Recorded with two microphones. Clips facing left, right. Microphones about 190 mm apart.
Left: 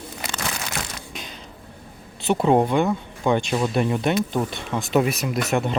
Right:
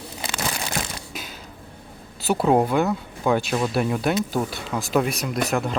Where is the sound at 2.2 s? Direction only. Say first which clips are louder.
Left 1 dB; 5° right (ahead or behind).